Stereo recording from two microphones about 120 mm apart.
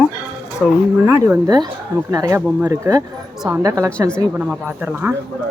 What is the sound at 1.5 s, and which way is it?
Speech, 35° right (ahead or behind).